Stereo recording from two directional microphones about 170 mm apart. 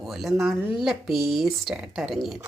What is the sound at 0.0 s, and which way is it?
Speech, centre (ahead or behind).